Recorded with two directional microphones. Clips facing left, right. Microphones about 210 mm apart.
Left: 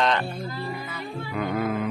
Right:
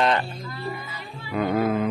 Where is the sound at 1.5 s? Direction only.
30° right (ahead or behind).